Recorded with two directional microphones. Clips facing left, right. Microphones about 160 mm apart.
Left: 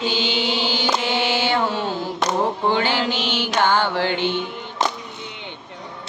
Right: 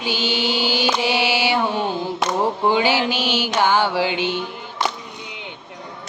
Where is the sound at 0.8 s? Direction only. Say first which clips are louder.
Right 1 dB; 10° right (ahead or behind).